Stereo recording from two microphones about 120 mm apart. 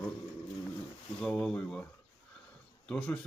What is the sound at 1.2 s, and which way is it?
Speech, 5° left (ahead or behind).